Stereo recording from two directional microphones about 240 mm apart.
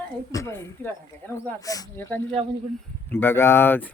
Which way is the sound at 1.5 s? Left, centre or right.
Centre.